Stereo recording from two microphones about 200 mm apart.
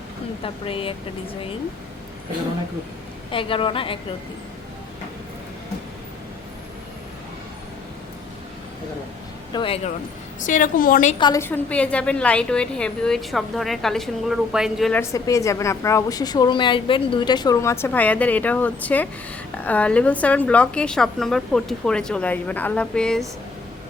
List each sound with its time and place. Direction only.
0.4 s a woman's voice: 25° left (ahead or behind)
3.3 s a woman's voice: 25° left (ahead or behind)
9.5 s a woman's voice: 25° left (ahead or behind)
10.4 s a woman's voice: 40° left (ahead or behind)
11.2 s a woman's voice: 15° left (ahead or behind); by 15.0 s centre (ahead or behind)
15.0 s a woman's voice: 15° left (ahead or behind)